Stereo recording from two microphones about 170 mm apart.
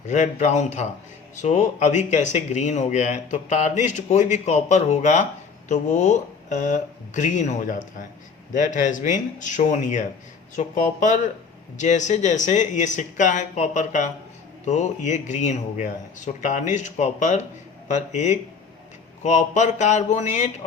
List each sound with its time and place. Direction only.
0.1 s speech: 45° left (ahead or behind)